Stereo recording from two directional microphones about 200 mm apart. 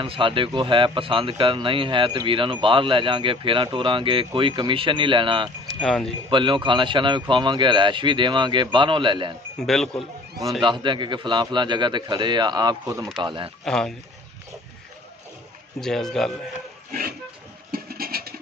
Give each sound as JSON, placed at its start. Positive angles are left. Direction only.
{"t": 0.0, "sound": "a man's voice", "side_deg": -25}
{"t": 5.8, "sound": "a man's voice", "side_deg": 0}
{"t": 6.3, "sound": "a man's voice", "side_deg": -25}
{"t": 9.6, "sound": "a man's voice", "side_deg": 0}
{"t": 10.6, "sound": "a man's voice", "side_deg": -25}
{"t": 13.7, "sound": "a man's voice", "side_deg": 0}
{"t": 15.8, "sound": "a man's voice", "side_deg": 0}
{"t": 17.6, "sound": "a sound", "side_deg": -50}